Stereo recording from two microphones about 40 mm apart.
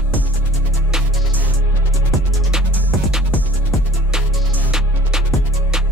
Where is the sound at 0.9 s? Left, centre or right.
Centre.